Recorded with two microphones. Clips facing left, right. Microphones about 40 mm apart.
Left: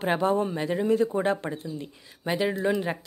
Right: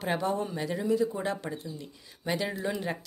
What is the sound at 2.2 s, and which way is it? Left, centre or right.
Speech, centre.